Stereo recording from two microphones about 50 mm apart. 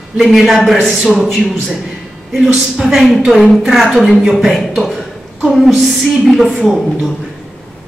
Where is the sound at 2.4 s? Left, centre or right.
Centre.